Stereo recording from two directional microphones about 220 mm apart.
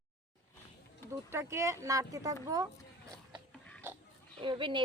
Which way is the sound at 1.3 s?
10° right (ahead or behind).